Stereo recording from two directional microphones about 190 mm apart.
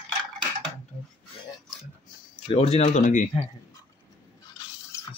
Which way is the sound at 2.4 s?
35° left (ahead or behind).